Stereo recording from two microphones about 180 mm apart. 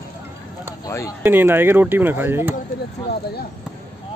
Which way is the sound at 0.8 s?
15° left (ahead or behind).